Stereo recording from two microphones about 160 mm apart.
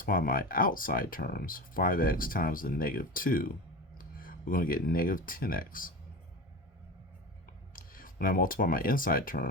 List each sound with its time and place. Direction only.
0.0 s speech: 60° left (ahead or behind)
7.7 s speech: 60° left (ahead or behind)